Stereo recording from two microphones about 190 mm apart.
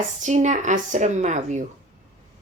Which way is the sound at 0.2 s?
40° right (ahead or behind).